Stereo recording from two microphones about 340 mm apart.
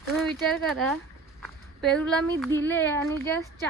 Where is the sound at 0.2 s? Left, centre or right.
Centre.